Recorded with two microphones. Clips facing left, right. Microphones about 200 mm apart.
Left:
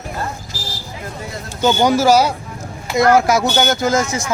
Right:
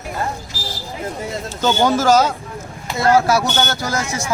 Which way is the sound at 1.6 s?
10° left (ahead or behind).